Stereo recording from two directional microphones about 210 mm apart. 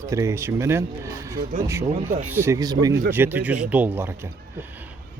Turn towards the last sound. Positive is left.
turn(degrees=-10)  # may be behind; listen again after turning